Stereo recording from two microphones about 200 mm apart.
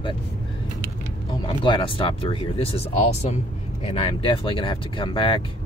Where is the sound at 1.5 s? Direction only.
25° left (ahead or behind).